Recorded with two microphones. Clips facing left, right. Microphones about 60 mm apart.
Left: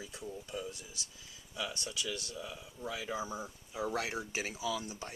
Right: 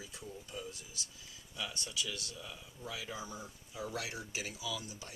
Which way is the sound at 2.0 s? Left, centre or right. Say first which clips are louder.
Even; left.